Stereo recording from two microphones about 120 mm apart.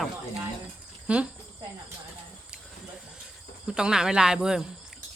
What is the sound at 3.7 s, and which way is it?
Speech, 5° right (ahead or behind).